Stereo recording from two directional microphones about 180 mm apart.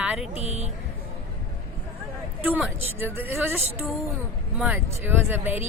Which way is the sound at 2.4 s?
10° right (ahead or behind).